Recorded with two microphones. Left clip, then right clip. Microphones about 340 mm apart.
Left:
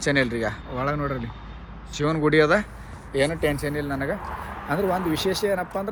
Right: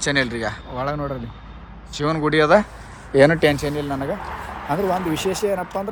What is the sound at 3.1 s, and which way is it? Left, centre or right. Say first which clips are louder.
Speech: right 9 dB; right.